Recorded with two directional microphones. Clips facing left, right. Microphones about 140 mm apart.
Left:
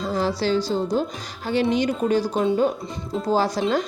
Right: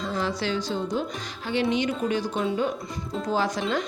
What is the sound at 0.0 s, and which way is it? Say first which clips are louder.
A woman's voice: left 5 dB; 35° left (ahead or behind).